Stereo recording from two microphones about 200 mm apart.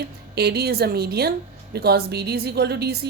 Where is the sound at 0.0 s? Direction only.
55° right (ahead or behind).